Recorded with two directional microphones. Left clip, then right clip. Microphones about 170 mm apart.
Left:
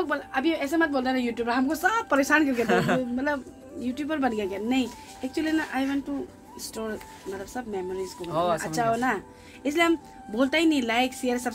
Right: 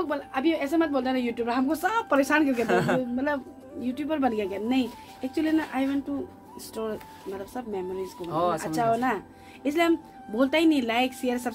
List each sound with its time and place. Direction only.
0.0 s speech: centre (ahead or behind)
2.6 s speech: 65° right (ahead or behind)
3.0 s speech: centre (ahead or behind)
8.2 s speech: 70° right (ahead or behind)
8.5 s speech: 5° right (ahead or behind)